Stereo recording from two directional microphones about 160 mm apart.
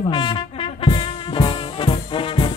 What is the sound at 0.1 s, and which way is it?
Music, 30° left (ahead or behind).